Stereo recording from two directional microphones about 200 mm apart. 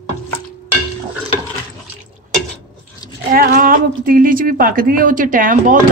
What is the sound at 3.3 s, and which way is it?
A woman's voice, 45° right (ahead or behind).